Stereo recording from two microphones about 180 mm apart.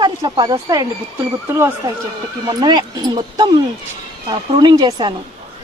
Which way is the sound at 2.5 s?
25° right (ahead or behind).